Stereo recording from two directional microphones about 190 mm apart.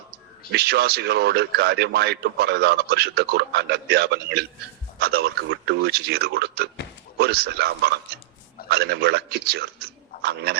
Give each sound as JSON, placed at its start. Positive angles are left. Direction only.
{"t": 0.5, "sound": "a man's voice", "side_deg": -60}